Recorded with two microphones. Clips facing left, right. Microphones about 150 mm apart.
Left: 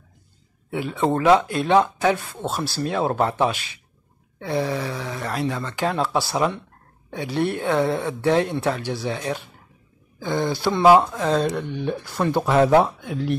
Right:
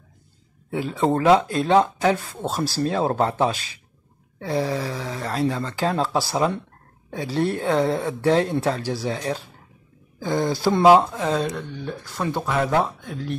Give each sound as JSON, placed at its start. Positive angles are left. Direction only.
{"t": 0.7, "sound": "speech", "side_deg": -35}
{"t": 10.2, "sound": "speech", "side_deg": -40}
{"t": 10.8, "sound": "speech", "side_deg": -20}
{"t": 12.0, "sound": "speech", "side_deg": 5}
{"t": 12.4, "sound": "speech", "side_deg": 20}
{"t": 13.0, "sound": "speech", "side_deg": 10}